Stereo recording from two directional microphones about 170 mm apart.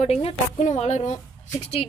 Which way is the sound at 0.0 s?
35° left (ahead or behind).